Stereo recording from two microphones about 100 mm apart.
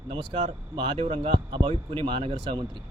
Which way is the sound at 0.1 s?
60° right (ahead or behind).